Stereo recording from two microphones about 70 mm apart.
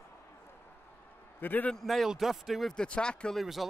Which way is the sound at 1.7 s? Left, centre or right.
Centre.